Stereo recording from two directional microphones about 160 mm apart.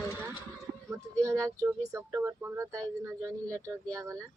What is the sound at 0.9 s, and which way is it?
Music, 20° right (ahead or behind).